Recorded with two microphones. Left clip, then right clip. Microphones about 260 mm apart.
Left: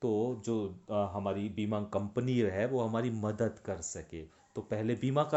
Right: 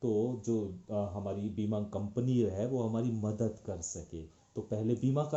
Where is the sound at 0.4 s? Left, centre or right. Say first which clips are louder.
Even; left.